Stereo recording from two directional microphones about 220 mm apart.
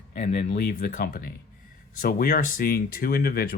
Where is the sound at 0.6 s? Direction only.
40° left (ahead or behind).